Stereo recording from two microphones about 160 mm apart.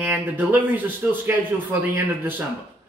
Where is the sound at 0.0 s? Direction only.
10° right (ahead or behind).